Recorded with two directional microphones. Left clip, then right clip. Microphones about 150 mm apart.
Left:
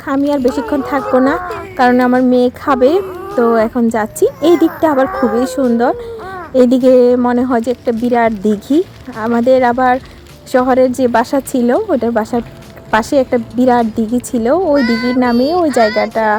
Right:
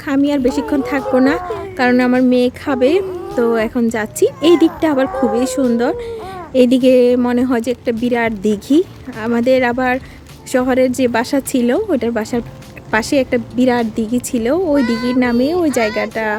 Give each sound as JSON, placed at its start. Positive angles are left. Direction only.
{"t": 0.1, "sound": "a child's voice", "side_deg": -10}
{"t": 1.8, "sound": "a sound", "side_deg": -15}
{"t": 2.3, "sound": "a child's voice", "side_deg": -5}